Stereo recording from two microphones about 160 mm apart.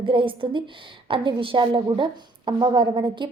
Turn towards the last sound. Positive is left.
turn(degrees=-30)  # may be behind; listen again after turning